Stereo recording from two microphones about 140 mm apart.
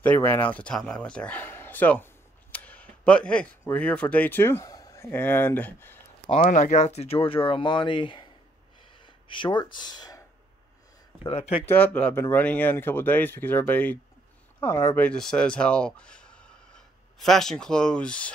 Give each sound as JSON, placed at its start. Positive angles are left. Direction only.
{"t": 0.0, "sound": "a man's voice", "side_deg": 15}
{"t": 6.4, "sound": "speech", "side_deg": 65}
{"t": 8.9, "sound": "a sound", "side_deg": 35}
{"t": 11.2, "sound": "speech", "side_deg": 45}
{"t": 11.7, "sound": "speech", "side_deg": 10}
{"t": 15.0, "sound": "speech", "side_deg": 5}